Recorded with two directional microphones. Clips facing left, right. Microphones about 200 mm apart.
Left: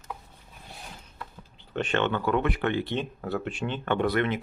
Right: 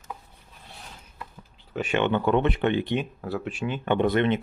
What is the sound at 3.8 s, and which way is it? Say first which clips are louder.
Speech: right 3 dB; 20° right (ahead or behind).